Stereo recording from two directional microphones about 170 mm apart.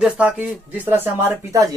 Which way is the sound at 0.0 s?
10° right (ahead or behind).